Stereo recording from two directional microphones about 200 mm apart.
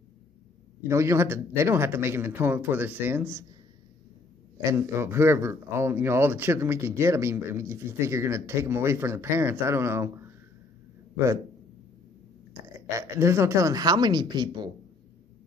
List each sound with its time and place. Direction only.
0.8 s speech: 15° right (ahead or behind)
4.6 s speech: 15° right (ahead or behind)
12.6 s a sound: 15° right (ahead or behind)
12.9 s speech: 15° right (ahead or behind)